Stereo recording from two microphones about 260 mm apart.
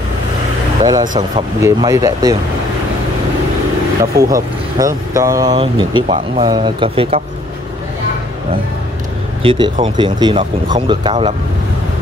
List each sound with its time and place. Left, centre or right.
1.0 s speech: right
1.6 s speech: centre
4.0 s speech: centre
9.4 s speech: centre